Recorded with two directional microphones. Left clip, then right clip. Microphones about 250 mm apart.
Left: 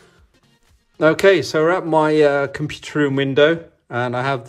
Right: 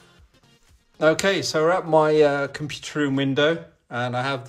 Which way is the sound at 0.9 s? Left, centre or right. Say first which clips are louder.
Left 6 dB; left.